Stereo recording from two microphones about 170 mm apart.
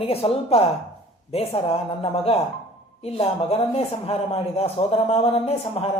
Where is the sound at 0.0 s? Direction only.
35° left (ahead or behind).